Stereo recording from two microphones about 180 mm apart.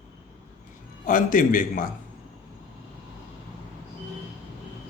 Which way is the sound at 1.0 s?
50° left (ahead or behind).